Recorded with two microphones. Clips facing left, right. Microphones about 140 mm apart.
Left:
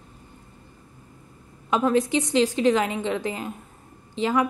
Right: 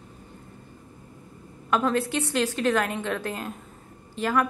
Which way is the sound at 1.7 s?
15° left (ahead or behind).